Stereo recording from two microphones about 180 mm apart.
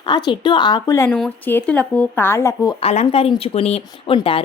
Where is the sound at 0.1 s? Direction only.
25° left (ahead or behind).